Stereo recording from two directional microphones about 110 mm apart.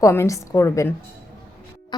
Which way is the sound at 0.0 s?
25° left (ahead or behind).